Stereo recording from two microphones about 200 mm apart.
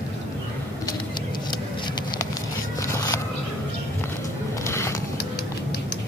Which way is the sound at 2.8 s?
15° left (ahead or behind).